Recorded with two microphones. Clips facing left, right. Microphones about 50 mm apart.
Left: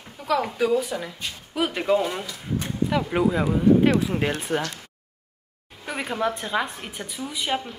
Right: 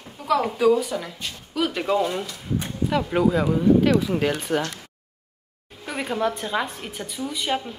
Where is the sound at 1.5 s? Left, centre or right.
Centre.